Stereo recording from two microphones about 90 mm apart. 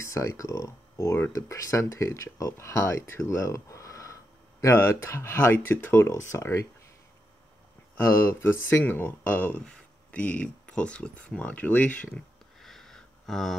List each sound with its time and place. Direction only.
0.0 s speech: 35° left (ahead or behind)
8.0 s speech: 30° left (ahead or behind)
12.5 s a sound: 5° left (ahead or behind)